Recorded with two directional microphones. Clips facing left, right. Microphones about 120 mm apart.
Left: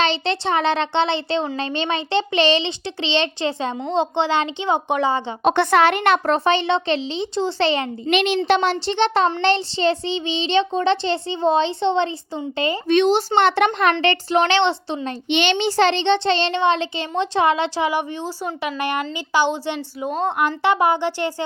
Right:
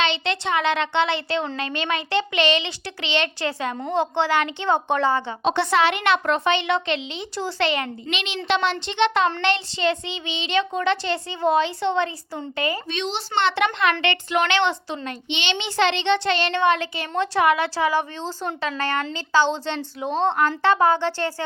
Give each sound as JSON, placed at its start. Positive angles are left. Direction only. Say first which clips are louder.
{"t": 0.0, "sound": "a child's voice", "louder": "left 3 dB", "side_deg": 35}
{"t": 5.4, "sound": "speech", "louder": "left 5 dB", "side_deg": 55}
{"t": 8.1, "sound": "a child's voice", "louder": "left 7 dB", "side_deg": 50}
{"t": 12.9, "sound": "a child's voice", "louder": "left 10 dB", "side_deg": 50}
{"t": 14.0, "sound": "speech", "louder": "left 4 dB", "side_deg": 35}
{"t": 15.3, "sound": "a child's voice", "louder": "left 9 dB", "side_deg": 50}